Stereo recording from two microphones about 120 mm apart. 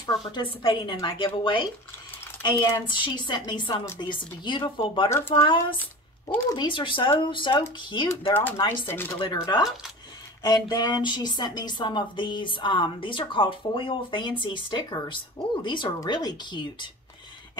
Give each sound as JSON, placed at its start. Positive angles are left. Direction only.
{"t": 0.0, "sound": "a woman's voice", "side_deg": 40}
{"t": 6.6, "sound": "a woman's voice", "side_deg": 45}
{"t": 8.5, "sound": "speech", "side_deg": 20}
{"t": 9.2, "sound": "speech", "side_deg": 35}